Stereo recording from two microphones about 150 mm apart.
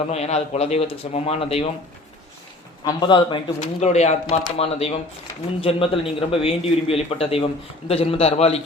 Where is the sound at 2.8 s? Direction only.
30° left (ahead or behind).